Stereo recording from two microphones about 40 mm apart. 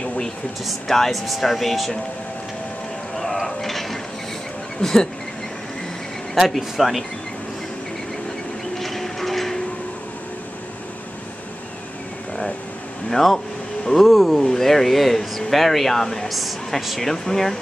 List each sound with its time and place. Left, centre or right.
0.7 s speech: centre
3.4 s mechanisms: centre
4.7 s speech: centre
6.3 s speech: centre
8.7 s a sound: centre
13.1 s speech: centre